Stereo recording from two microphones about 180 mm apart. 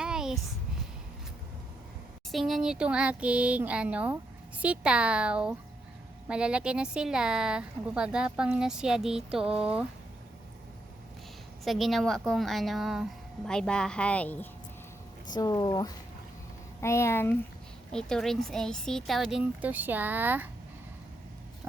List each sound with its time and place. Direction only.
0.0 s a sound: 5° right (ahead or behind)
2.3 s a sound: centre (ahead or behind)
6.2 s a woman's voice: 5° right (ahead or behind)
11.6 s a woman's voice: centre (ahead or behind)
15.3 s speech: 20° left (ahead or behind)
17.9 s a woman's voice: 5° left (ahead or behind)